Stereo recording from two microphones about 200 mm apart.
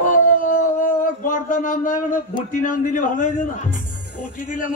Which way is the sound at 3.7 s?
40° left (ahead or behind).